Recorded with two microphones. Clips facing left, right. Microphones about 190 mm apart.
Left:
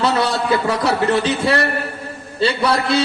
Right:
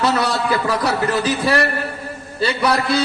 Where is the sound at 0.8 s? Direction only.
25° left (ahead or behind).